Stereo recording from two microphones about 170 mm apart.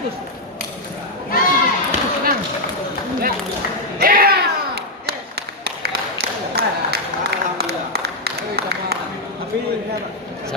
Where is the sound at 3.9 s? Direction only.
60° right (ahead or behind).